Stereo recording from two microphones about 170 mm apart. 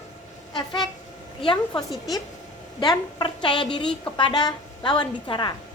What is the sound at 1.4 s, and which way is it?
A woman's voice, 25° left (ahead or behind).